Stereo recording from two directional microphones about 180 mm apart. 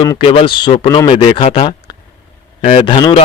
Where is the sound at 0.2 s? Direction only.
30° left (ahead or behind).